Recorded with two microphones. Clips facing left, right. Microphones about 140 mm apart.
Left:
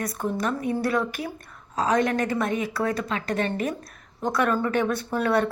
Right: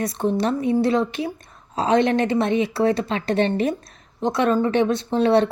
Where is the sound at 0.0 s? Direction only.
25° right (ahead or behind).